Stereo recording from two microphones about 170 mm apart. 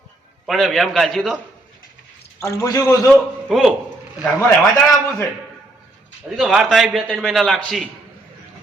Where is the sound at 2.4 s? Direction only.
20° left (ahead or behind).